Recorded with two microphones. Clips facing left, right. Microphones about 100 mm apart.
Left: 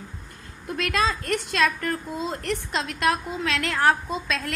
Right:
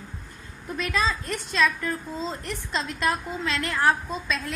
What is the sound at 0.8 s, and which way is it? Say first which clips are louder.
A woman's voice: left 2 dB; 70° left (ahead or behind).